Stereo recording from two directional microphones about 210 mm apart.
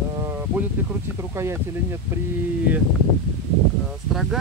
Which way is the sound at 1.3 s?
10° right (ahead or behind).